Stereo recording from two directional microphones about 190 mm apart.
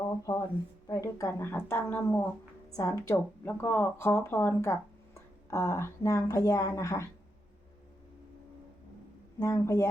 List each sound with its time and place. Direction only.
0.3 s speech: 25° left (ahead or behind)
9.4 s speech: 15° left (ahead or behind)